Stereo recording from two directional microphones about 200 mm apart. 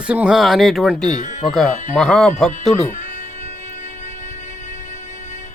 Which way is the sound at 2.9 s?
40° left (ahead or behind).